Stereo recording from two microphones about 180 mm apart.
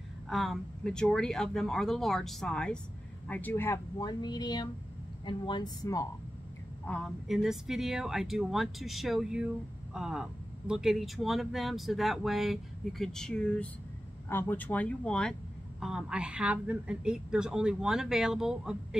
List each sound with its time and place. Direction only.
0.3 s speech: centre (ahead or behind); by 6.0 s 20° left (ahead or behind)
6.9 s speech: centre (ahead or behind)